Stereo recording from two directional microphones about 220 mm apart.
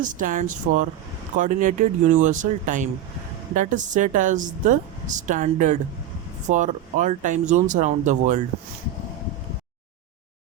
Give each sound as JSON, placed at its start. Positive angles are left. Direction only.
{"t": 0.0, "sound": "speech", "side_deg": -35}